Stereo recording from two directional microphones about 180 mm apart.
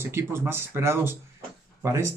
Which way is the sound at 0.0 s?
15° right (ahead or behind).